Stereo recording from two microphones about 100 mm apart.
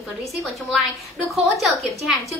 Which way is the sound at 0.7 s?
Centre (ahead or behind).